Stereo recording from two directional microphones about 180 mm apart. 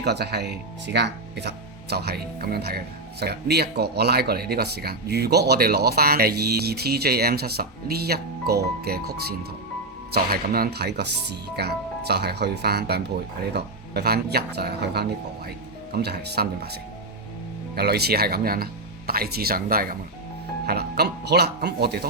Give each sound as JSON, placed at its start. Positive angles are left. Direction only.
{"t": 0.0, "sound": "speech", "side_deg": -65}